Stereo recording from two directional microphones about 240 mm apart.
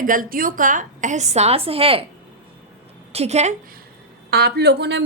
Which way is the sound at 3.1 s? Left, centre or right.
Right.